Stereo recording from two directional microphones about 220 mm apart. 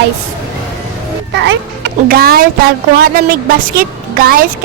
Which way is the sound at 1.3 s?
55° right (ahead or behind).